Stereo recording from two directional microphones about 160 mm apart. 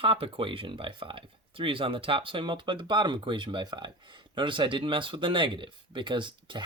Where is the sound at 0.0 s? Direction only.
35° right (ahead or behind).